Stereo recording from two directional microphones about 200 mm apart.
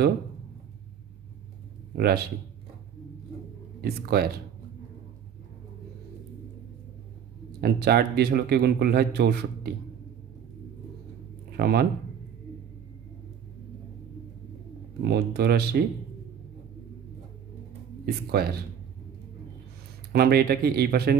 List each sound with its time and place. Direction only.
2.0 s speech: 50° right (ahead or behind)
3.8 s speech: 50° right (ahead or behind)
7.6 s speech: 55° right (ahead or behind)
11.5 s speech: 50° right (ahead or behind)
15.0 s speech: 55° right (ahead or behind)
18.4 s speech: 50° right (ahead or behind)
20.1 s speech: 50° right (ahead or behind)